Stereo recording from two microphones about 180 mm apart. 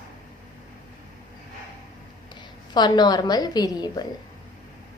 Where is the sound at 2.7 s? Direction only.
25° left (ahead or behind).